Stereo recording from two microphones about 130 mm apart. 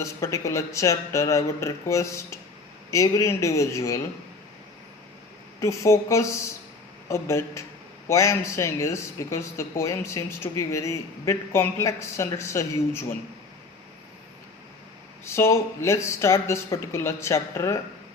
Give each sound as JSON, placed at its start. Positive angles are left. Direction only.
{"t": 0.0, "sound": "speech", "side_deg": 25}
{"t": 5.5, "sound": "speech", "side_deg": 25}
{"t": 15.2, "sound": "speech", "side_deg": 20}